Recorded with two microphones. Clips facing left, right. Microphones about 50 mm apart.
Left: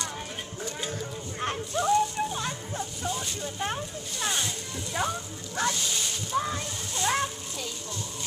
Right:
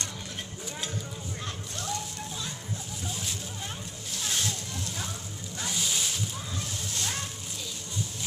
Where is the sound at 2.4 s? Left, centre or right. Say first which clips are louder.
Left 5 dB; left.